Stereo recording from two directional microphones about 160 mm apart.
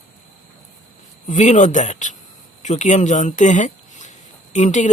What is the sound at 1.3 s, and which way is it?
A woman's voice, 50° left (ahead or behind).